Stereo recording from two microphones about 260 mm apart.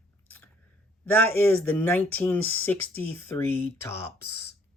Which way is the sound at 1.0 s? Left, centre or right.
Centre.